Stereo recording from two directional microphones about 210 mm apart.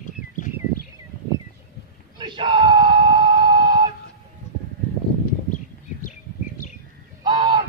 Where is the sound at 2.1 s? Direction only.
20° right (ahead or behind).